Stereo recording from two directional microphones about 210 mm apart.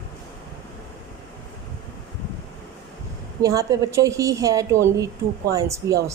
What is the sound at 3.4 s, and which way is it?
A woman's voice, 15° right (ahead or behind).